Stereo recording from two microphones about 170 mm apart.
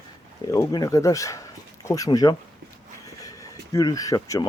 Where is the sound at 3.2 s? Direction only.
20° left (ahead or behind).